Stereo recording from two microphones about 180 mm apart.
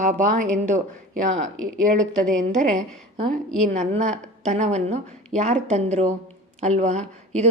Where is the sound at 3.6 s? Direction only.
40° right (ahead or behind).